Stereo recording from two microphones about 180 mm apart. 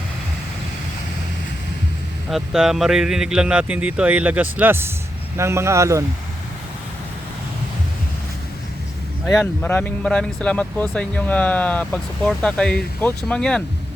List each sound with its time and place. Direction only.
2.3 s speech: centre (ahead or behind)
9.2 s speech: 5° left (ahead or behind)